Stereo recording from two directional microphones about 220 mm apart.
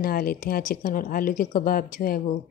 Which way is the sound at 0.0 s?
40° left (ahead or behind).